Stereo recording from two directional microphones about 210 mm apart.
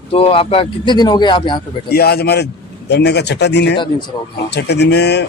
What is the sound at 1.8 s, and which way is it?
A man's voice, 50° left (ahead or behind).